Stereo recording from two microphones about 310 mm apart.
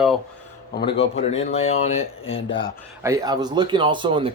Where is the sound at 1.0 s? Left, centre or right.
Left.